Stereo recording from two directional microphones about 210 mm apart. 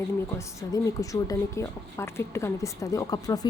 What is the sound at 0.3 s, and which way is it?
A woman's voice, 15° left (ahead or behind).